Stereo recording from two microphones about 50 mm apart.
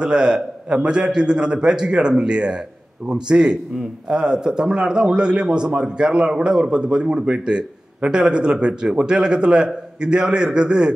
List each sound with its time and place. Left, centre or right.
0.0 s a man's voice: centre